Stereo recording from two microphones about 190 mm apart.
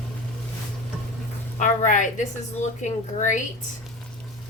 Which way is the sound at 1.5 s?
40° left (ahead or behind).